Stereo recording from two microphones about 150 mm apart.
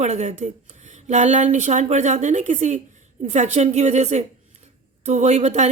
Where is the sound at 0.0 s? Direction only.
50° right (ahead or behind).